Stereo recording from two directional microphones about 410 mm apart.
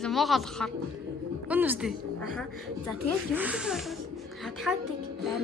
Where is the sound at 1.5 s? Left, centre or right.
Centre.